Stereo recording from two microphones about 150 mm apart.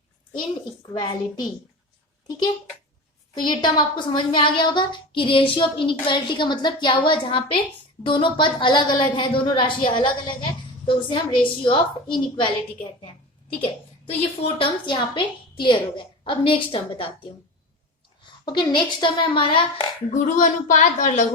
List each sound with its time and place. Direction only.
0.8 s a woman's voice: 30° left (ahead or behind)
3.4 s speech: 30° left (ahead or behind)
14.2 s speech: 35° left (ahead or behind)
18.2 s speech: 30° left (ahead or behind)
20.2 s a woman's voice: 60° left (ahead or behind)